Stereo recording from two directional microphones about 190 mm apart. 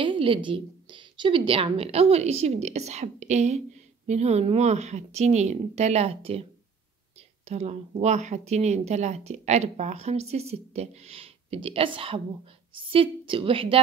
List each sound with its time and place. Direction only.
0.0 s speech: 25° right (ahead or behind)
7.4 s a woman's voice: 35° right (ahead or behind)